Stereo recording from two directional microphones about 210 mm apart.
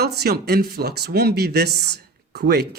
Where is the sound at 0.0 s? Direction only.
50° right (ahead or behind).